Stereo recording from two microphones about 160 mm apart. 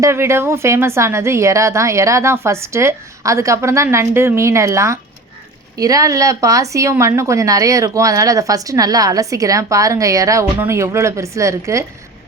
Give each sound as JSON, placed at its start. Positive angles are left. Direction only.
{"t": 0.0, "sound": "a woman's voice", "side_deg": -15}